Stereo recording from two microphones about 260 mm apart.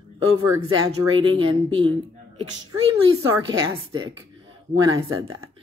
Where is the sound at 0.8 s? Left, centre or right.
Centre.